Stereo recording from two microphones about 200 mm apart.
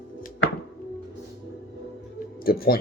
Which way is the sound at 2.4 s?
50° left (ahead or behind).